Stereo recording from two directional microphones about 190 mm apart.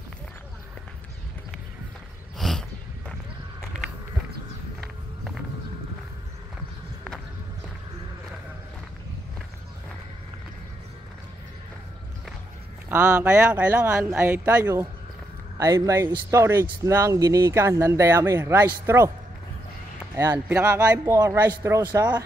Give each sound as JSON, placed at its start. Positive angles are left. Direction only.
{"t": 2.3, "sound": "a sound", "side_deg": 0}
{"t": 12.9, "sound": "speech", "side_deg": -5}
{"t": 20.2, "sound": "speech", "side_deg": -15}